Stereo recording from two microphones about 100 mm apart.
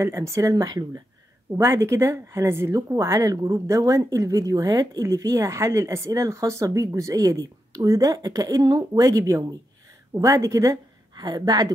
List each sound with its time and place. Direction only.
0.0 s speech: 30° right (ahead or behind)
1.5 s speech: 30° right (ahead or behind)
11.1 s a woman's voice: 45° right (ahead or behind)